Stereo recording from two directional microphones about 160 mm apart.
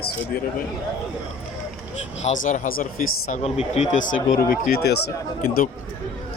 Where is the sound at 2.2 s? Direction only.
50° left (ahead or behind).